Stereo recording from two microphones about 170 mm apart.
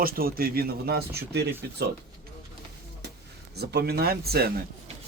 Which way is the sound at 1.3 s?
75° right (ahead or behind).